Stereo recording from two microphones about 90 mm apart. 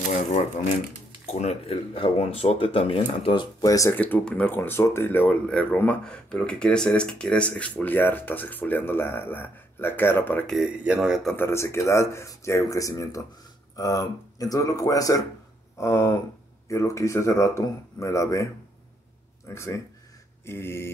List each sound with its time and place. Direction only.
1.6 s speech: 90° left
3.6 s speech: 40° left (ahead or behind)
3.9 s speech: 20° left (ahead or behind)
4.6 s speech: 30° left (ahead or behind)
10.4 s a man's voice: centre (ahead or behind)
11.3 s speech: 30° left (ahead or behind)